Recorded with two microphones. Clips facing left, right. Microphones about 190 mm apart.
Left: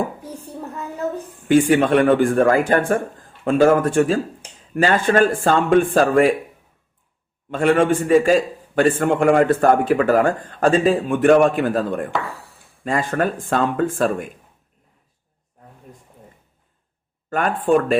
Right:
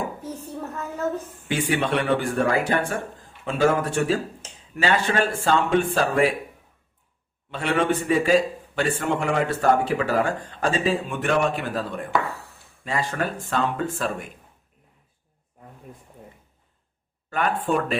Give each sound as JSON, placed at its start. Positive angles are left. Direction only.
{"t": 0.2, "sound": "a sound", "side_deg": 10}
{"t": 1.5, "sound": "a man's voice", "side_deg": 50}
{"t": 7.5, "sound": "a man's voice", "side_deg": 50}
{"t": 12.3, "sound": "chop", "side_deg": 10}
{"t": 12.8, "sound": "a man's voice", "side_deg": 50}
{"t": 17.2, "sound": "a man's voice", "side_deg": 45}